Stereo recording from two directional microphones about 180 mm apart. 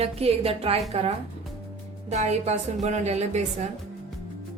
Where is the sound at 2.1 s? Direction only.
40° right (ahead or behind).